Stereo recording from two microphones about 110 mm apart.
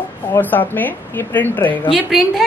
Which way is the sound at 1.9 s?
Centre (ahead or behind).